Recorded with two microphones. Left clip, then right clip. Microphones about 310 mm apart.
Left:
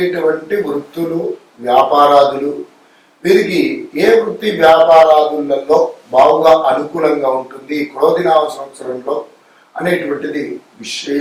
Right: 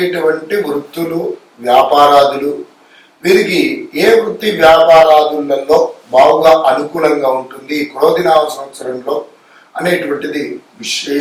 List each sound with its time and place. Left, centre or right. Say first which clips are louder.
0.0 s a man's voice: right 1 dB; centre
3.2 s a man's voice: right 1 dB; centre
4.6 s a man's voice: right 1 dB; left
9.7 s a man's voice: right 2 dB; centre